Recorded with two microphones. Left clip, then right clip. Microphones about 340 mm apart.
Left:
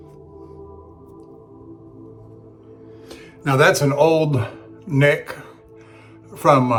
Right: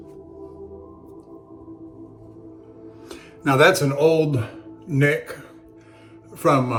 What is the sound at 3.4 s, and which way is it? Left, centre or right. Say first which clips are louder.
Speech: even; centre.